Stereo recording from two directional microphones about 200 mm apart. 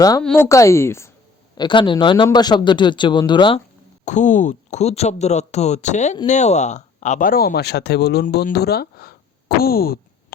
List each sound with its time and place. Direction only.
0.2 s a woman's voice: 5° left (ahead or behind)
0.4 s a woman's voice: 15° left (ahead or behind)
4.0 s speech: 40° left (ahead or behind)